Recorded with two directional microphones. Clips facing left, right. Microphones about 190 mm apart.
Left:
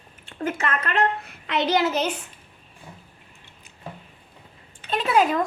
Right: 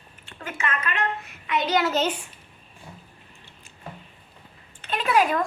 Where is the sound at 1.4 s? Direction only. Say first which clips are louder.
Left 1 dB; 75° left (ahead or behind).